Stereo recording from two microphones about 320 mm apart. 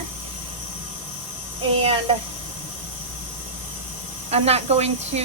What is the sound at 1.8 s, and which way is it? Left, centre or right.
Speech, centre.